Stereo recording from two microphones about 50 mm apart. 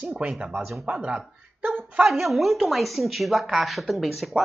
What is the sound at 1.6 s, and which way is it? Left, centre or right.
Speech, right.